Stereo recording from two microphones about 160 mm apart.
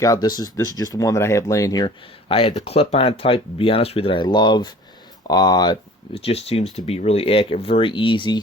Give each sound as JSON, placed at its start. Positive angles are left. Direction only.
{"t": 0.0, "sound": "speech", "side_deg": 25}
{"t": 2.3, "sound": "speech", "side_deg": 35}
{"t": 6.1, "sound": "speech", "side_deg": 40}